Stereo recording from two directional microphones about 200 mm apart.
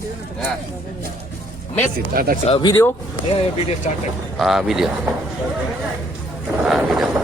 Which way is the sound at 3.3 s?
30° left (ahead or behind).